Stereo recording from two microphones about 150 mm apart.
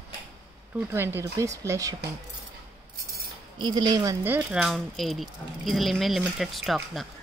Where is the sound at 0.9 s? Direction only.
15° right (ahead or behind).